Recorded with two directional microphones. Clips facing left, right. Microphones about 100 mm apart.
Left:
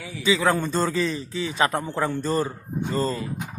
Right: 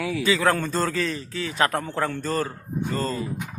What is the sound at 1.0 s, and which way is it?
Speech, 20° left (ahead or behind).